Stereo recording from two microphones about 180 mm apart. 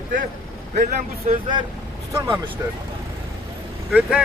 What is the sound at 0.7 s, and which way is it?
Speech, 40° right (ahead or behind).